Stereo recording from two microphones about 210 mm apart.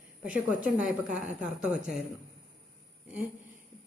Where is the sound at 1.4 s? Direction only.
5° right (ahead or behind).